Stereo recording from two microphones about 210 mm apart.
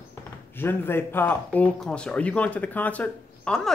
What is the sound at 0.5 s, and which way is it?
Speech, 10° left (ahead or behind).